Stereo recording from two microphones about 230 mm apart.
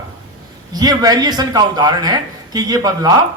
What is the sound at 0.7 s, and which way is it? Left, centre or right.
A man's voice, centre.